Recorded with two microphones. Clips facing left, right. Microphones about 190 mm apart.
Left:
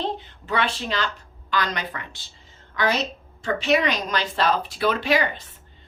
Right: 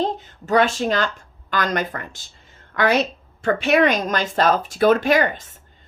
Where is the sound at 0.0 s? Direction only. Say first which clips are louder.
Right 5 dB; 45° right (ahead or behind).